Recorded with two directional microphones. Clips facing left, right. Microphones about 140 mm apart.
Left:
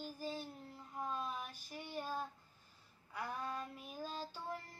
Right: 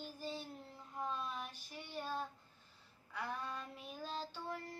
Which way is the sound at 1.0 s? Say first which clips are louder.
Even; 10° left (ahead or behind).